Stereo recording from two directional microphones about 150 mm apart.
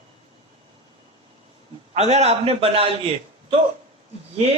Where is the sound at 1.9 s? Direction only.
45° right (ahead or behind).